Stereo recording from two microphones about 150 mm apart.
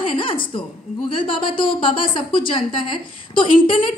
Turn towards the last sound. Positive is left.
turn(degrees=35)  # may be behind; listen again after turning